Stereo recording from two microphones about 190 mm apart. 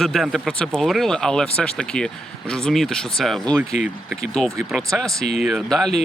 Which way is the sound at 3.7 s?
40° left (ahead or behind).